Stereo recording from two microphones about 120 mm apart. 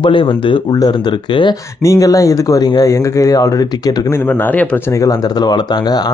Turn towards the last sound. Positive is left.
turn(degrees=35)  # may be behind; listen again after turning